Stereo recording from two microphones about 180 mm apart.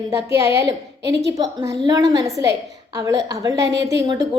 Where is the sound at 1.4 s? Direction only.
20° right (ahead or behind).